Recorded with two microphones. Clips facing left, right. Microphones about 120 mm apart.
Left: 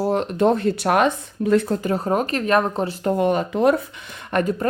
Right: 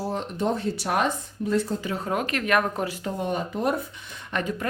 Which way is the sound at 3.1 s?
75° left (ahead or behind).